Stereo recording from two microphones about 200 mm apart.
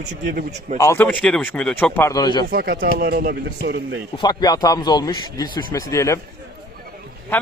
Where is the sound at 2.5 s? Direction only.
50° right (ahead or behind).